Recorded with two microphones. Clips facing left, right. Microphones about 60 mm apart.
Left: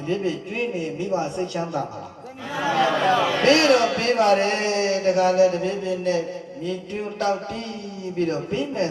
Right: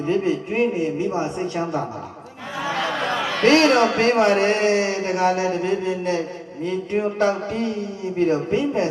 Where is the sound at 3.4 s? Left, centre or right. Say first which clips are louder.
Right 3 dB; right.